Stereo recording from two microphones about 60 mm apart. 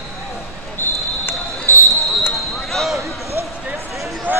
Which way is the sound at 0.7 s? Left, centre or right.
Left.